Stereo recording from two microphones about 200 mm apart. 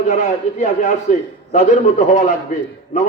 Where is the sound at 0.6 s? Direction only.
40° left (ahead or behind).